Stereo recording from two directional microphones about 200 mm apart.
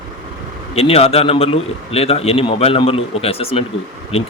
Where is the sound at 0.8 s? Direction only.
30° left (ahead or behind).